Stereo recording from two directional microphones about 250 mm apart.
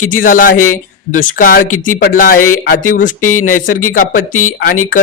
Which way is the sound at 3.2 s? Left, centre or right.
Left.